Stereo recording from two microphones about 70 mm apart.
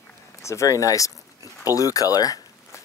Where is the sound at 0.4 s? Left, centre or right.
Left.